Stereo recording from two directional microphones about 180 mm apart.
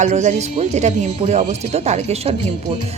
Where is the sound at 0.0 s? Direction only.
40° right (ahead or behind).